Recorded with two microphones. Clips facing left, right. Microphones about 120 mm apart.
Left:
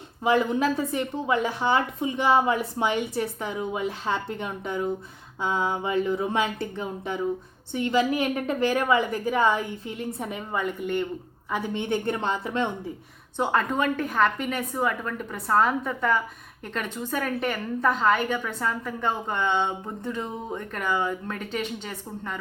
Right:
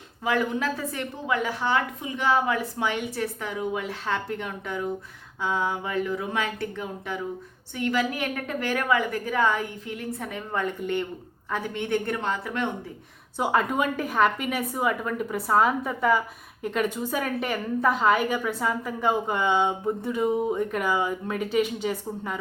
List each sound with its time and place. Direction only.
0.3 s a woman's voice: 20° left (ahead or behind)
10.5 s speech: 5° left (ahead or behind)
11.7 s a woman's voice: 20° left (ahead or behind)
13.3 s a woman's voice: 5° right (ahead or behind)